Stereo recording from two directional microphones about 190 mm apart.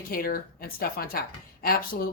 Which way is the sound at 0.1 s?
50° left (ahead or behind).